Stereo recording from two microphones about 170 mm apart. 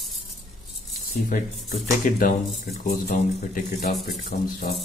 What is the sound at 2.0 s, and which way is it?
Speech, 55° left (ahead or behind).